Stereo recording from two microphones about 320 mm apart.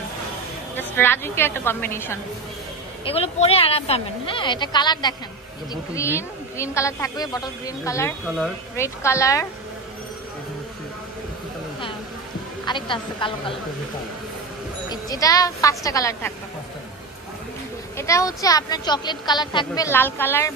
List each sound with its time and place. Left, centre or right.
0.7 s speech: centre
3.1 s speech: centre
12.6 s speech: centre
14.9 s speech: centre
17.9 s speech: centre